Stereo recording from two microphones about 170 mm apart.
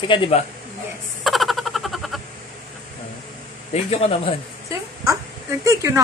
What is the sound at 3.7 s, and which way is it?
Speech, 35° left (ahead or behind).